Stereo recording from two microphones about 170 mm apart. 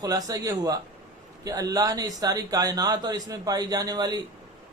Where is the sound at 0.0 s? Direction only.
20° right (ahead or behind).